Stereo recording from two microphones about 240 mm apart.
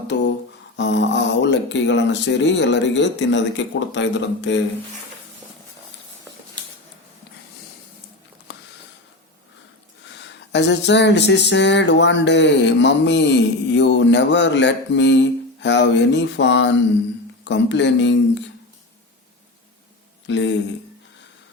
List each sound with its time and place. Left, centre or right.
0.1 s speech: left
10.2 s speech: left
20.2 s speech: left